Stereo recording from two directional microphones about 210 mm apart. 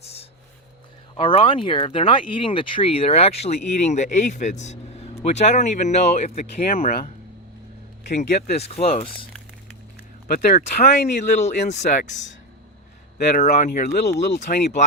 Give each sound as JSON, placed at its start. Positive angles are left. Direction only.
{"t": 1.1, "sound": "speech", "side_deg": 25}
{"t": 8.0, "sound": "speech", "side_deg": 50}
{"t": 8.4, "sound": "speech", "side_deg": 30}
{"t": 10.2, "sound": "speech", "side_deg": 45}
{"t": 11.3, "sound": "speech", "side_deg": 35}
{"t": 13.1, "sound": "speech", "side_deg": 35}